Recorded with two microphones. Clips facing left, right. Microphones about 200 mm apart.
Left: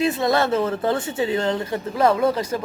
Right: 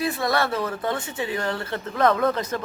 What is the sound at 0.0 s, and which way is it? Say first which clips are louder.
Speech: left 4 dB; 20° left (ahead or behind).